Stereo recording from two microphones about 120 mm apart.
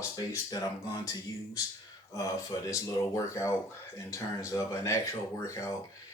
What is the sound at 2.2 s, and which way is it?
Speech, 30° left (ahead or behind).